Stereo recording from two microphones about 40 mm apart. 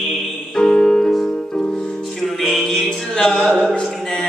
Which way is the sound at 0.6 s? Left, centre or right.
Centre.